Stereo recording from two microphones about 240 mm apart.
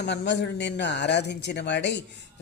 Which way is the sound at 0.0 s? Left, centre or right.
Left.